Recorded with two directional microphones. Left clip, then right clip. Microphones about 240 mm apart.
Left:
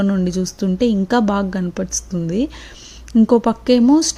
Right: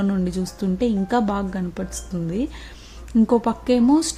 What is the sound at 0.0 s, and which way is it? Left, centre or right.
Speech, centre.